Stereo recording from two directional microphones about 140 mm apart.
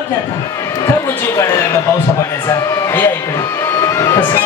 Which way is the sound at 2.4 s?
20° left (ahead or behind).